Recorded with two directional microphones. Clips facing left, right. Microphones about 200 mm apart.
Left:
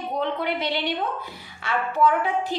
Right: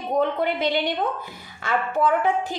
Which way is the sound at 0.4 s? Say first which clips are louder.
Right 3 dB; 50° right (ahead or behind).